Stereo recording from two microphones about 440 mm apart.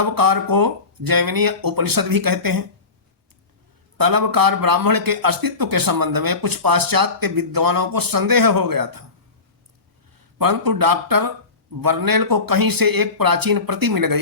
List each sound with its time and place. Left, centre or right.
0.0 s a man's voice: right
3.9 s a man's voice: right
10.2 s a man's voice: right